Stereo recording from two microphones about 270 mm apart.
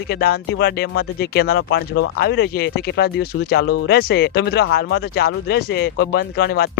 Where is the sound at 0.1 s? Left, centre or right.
Left.